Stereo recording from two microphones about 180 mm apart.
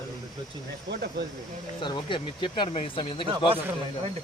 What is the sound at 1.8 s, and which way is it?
Speech, 25° left (ahead or behind).